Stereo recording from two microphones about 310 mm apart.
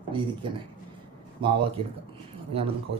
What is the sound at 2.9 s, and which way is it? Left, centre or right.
Speech, right.